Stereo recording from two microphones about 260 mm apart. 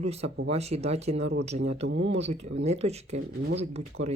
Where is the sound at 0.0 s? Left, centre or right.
Right.